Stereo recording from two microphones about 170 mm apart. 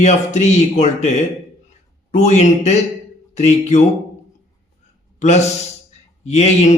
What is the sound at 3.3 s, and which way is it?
Speech, 40° left (ahead or behind).